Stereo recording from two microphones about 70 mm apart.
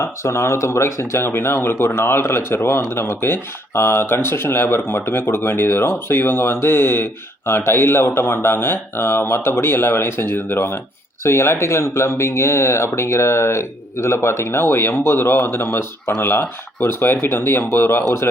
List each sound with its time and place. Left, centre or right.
0.0 s speech: left